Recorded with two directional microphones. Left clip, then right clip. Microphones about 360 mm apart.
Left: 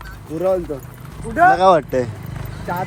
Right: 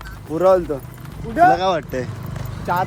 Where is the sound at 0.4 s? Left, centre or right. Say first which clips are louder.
Right 4 dB; centre.